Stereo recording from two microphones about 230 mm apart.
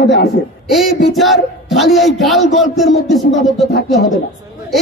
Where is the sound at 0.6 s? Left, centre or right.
Centre.